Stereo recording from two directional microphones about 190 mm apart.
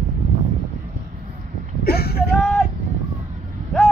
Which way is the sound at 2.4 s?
Centre (ahead or behind).